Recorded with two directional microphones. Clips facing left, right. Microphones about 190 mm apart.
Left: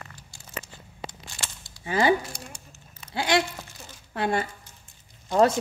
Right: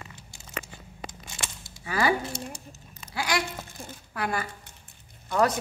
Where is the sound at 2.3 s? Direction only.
25° right (ahead or behind).